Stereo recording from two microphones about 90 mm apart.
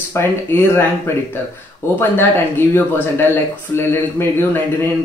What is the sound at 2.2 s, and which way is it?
Speech, 25° left (ahead or behind).